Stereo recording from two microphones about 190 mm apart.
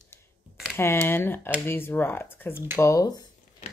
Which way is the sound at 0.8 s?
10° left (ahead or behind).